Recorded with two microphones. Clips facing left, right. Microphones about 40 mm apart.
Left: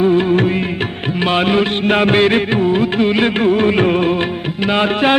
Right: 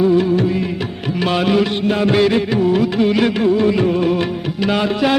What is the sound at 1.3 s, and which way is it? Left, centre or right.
Music, left.